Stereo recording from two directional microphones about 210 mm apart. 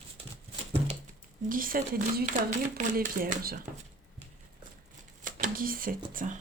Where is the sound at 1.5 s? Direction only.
40° right (ahead or behind).